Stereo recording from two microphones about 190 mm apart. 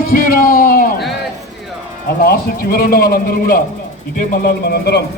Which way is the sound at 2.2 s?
50° left (ahead or behind).